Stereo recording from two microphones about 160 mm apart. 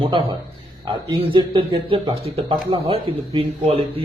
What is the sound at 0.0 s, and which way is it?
Speech, 35° right (ahead or behind).